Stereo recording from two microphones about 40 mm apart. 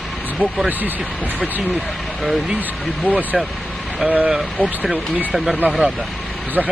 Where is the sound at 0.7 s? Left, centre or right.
Right.